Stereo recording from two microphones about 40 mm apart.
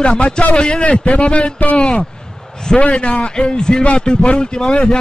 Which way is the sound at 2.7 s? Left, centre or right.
Centre.